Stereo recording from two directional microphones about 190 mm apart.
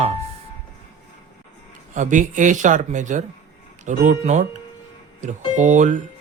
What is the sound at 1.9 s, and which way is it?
Speech, 40° right (ahead or behind).